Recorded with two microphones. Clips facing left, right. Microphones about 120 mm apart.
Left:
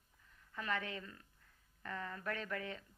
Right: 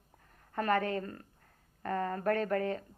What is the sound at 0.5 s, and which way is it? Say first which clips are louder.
A woman's voice: right 11 dB; 55° right (ahead or behind).